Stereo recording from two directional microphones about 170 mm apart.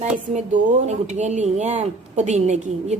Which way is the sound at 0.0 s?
45° right (ahead or behind).